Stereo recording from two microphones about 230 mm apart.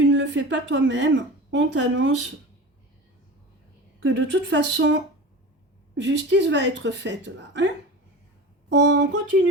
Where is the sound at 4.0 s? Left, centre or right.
Right.